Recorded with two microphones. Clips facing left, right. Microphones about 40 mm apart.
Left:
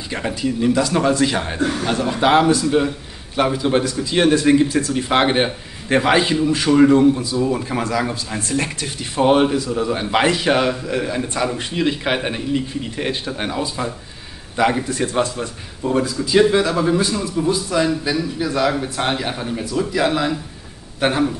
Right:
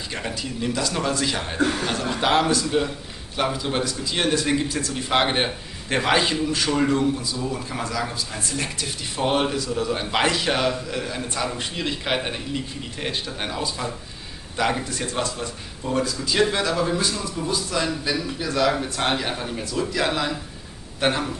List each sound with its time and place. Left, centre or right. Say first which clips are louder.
0.1 s a man's voice: left 9 dB; centre
4.6 s speech: left 7 dB; left
4.9 s a man's voice: left 3 dB; centre
17.0 s speech: left 5 dB; left
17.4 s a man's voice: left 7 dB; centre